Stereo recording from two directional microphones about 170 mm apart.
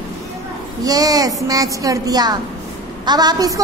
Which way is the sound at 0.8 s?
20° right (ahead or behind).